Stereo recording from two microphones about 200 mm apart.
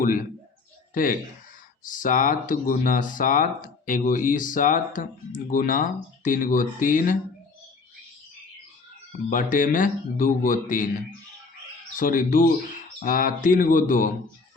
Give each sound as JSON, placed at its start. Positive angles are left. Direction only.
{"t": 0.0, "sound": "speech", "side_deg": 45}
{"t": 9.3, "sound": "speech", "side_deg": 40}
{"t": 11.9, "sound": "speech", "side_deg": 45}